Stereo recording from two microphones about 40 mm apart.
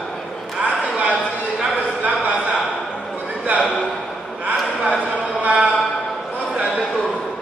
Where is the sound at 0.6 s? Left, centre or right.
Right.